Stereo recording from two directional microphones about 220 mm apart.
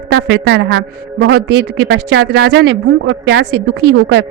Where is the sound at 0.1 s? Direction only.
55° right (ahead or behind).